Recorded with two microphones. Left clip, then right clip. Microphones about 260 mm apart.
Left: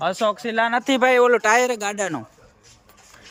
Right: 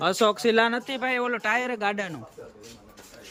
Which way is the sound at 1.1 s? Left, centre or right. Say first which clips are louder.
Left 9 dB; centre.